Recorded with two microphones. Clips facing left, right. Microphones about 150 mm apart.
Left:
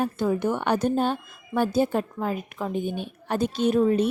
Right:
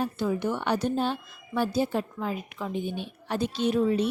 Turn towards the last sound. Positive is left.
turn(degrees=45)  # may be behind; listen again after turning